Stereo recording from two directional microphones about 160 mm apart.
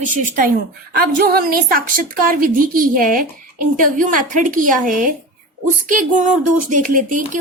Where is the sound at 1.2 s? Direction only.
70° right (ahead or behind).